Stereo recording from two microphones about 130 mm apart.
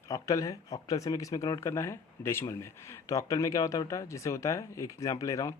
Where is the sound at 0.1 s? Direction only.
25° left (ahead or behind).